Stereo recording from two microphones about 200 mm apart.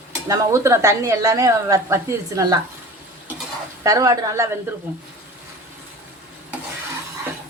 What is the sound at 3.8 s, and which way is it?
Speech, 15° right (ahead or behind).